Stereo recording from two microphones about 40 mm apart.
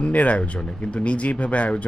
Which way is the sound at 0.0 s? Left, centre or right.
Left.